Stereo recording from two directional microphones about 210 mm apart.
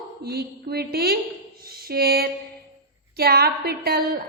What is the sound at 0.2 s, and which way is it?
A woman's voice, 50° right (ahead or behind).